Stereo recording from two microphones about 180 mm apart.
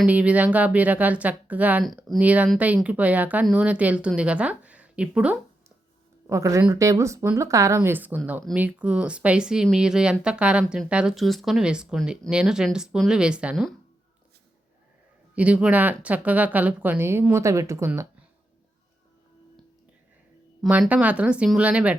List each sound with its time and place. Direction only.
0.0 s a woman's voice: 10° right (ahead or behind)
15.4 s a woman's voice: 5° right (ahead or behind)
20.6 s a woman's voice: 5° right (ahead or behind)